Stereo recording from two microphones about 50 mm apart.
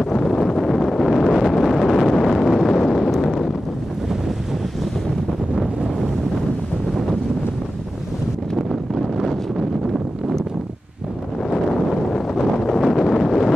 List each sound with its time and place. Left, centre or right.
0.0 s wind noise: centre
8.9 s wind noise: centre
11.5 s a sound: centre
12.6 s wind noise: centre